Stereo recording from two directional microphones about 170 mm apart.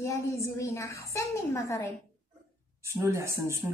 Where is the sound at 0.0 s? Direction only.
15° left (ahead or behind).